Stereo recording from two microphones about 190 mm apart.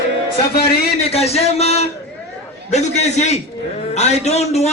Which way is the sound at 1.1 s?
35° left (ahead or behind).